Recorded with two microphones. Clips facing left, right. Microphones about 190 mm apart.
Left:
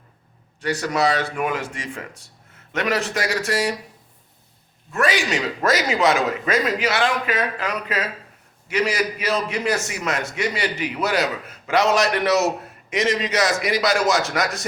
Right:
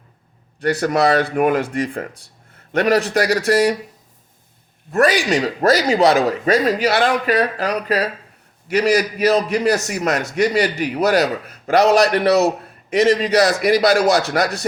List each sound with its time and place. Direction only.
0.6 s speech: 55° right (ahead or behind)
2.7 s a man's voice: 35° right (ahead or behind)
3.4 s speech: 60° right (ahead or behind)
4.9 s a man's voice: 40° right (ahead or behind)